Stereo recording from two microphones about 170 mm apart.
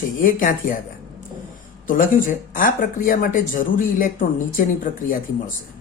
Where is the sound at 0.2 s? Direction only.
55° left (ahead or behind).